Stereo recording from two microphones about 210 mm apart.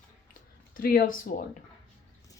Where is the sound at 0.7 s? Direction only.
45° left (ahead or behind).